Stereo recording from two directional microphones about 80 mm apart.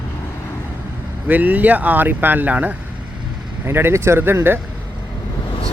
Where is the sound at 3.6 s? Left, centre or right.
Right.